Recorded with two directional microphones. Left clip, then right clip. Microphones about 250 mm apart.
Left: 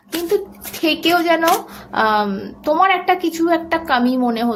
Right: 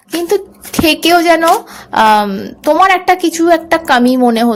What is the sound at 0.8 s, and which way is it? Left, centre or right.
A woman's voice, right.